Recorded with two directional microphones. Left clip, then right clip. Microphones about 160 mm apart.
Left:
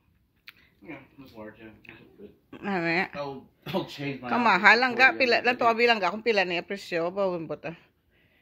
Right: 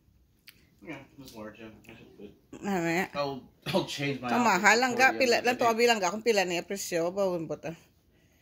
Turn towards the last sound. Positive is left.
turn(degrees=0)  # may be behind; listen again after turning